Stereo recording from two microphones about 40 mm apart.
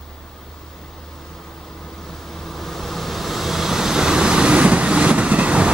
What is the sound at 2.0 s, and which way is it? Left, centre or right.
Vehicle, centre.